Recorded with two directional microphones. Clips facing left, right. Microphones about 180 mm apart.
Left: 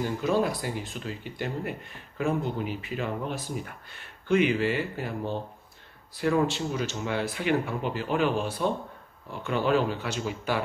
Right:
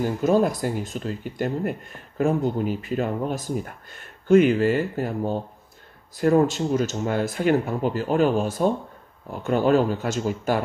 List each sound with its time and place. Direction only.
0.0 s speech: 45° right (ahead or behind)